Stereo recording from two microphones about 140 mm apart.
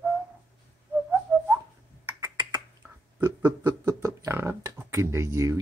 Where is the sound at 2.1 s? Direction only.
30° right (ahead or behind).